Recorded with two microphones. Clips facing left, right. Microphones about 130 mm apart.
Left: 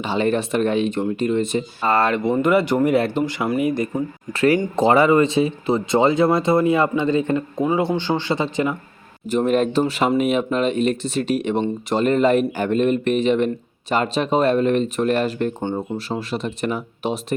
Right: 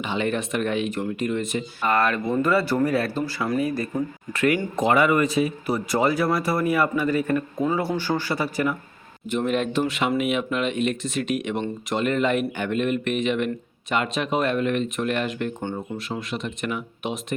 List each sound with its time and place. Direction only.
0.0 s speech: 35° left (ahead or behind); by 4.0 s 15° left (ahead or behind)
4.4 s speech: 35° left (ahead or behind)
9.3 s speech: 40° left (ahead or behind)